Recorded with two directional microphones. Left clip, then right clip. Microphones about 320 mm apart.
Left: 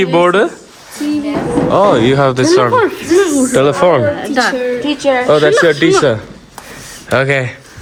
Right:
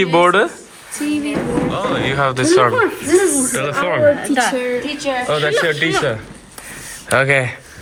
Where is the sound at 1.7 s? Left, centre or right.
Centre.